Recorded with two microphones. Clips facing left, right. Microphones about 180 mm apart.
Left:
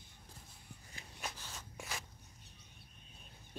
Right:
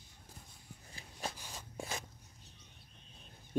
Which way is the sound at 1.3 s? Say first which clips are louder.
Right 2 dB; 15° right (ahead or behind).